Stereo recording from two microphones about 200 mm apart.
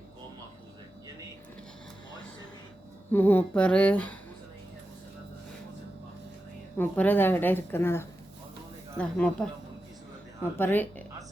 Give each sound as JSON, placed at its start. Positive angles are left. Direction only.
{"t": 3.1, "sound": "a woman's voice", "side_deg": 10}
{"t": 6.7, "sound": "a woman's voice", "side_deg": 10}
{"t": 10.6, "sound": "a woman's voice", "side_deg": 10}